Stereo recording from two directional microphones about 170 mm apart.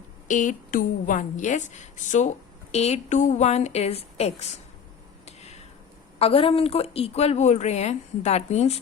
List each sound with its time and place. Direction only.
0.3 s a woman's voice: 50° left (ahead or behind)
5.2 s finger snapping: 40° left (ahead or behind)
6.1 s a woman's voice: 35° left (ahead or behind)